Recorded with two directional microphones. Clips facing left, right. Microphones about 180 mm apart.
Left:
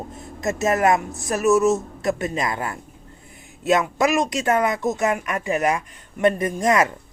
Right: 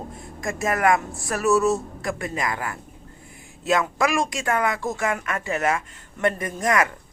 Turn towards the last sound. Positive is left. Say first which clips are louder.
# left 3 dB
turn(degrees=20)  # may be behind; listen again after turning